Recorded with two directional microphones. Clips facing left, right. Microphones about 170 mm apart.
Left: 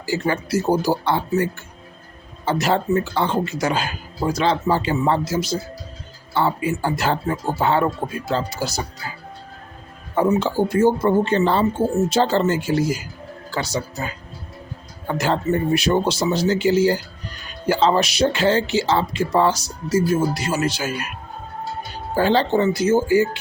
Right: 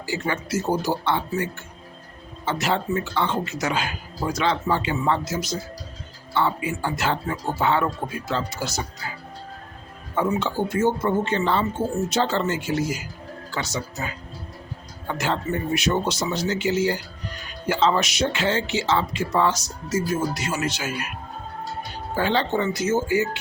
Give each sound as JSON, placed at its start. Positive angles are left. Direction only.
{"t": 0.0, "sound": "speech", "side_deg": 35}
{"t": 2.4, "sound": "speech", "side_deg": 40}
{"t": 10.3, "sound": "speech", "side_deg": 35}
{"t": 15.0, "sound": "speech", "side_deg": 40}
{"t": 22.1, "sound": "speech", "side_deg": 35}